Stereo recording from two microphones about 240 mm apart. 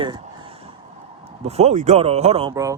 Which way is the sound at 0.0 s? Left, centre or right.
Centre.